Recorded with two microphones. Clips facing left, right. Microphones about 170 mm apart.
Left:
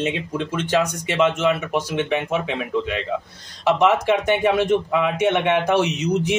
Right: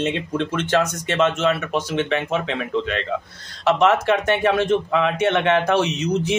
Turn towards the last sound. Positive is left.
turn(degrees=15)  # may be behind; listen again after turning